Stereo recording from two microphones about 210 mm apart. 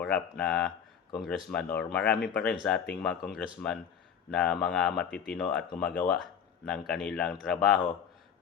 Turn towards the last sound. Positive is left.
turn(degrees=0)  # may be behind; listen again after turning